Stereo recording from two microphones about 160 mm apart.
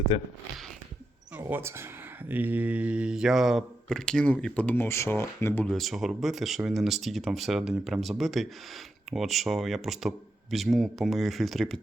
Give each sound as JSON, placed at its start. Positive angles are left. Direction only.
{"t": 0.1, "sound": "speech", "side_deg": 35}
{"t": 1.4, "sound": "speech", "side_deg": -15}
{"t": 5.7, "sound": "speech", "side_deg": 0}